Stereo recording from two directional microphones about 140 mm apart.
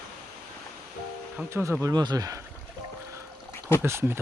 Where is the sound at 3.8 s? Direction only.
20° right (ahead or behind).